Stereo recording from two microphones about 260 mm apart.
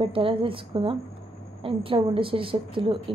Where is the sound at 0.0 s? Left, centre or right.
Centre.